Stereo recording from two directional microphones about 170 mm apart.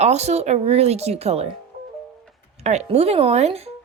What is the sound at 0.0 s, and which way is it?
A woman's voice, 40° right (ahead or behind).